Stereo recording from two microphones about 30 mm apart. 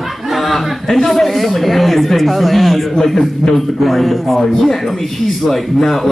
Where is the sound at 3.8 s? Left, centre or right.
Centre.